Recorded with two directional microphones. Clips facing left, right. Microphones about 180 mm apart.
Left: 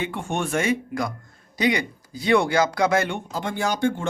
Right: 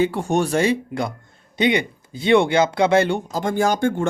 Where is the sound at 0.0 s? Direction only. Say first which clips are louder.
Right 8 dB; 40° right (ahead or behind).